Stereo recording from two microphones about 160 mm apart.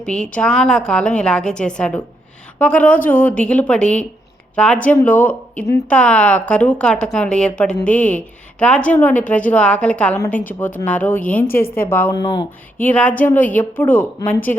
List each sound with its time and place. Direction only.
0.0 s a woman's voice: 5° left (ahead or behind)
12.1 s speech: 30° left (ahead or behind)
12.8 s speech: 10° left (ahead or behind)